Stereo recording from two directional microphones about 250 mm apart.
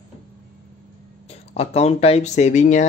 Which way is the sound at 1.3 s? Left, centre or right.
Left.